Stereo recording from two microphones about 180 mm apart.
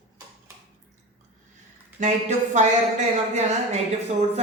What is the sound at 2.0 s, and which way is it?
Speech, 45° right (ahead or behind).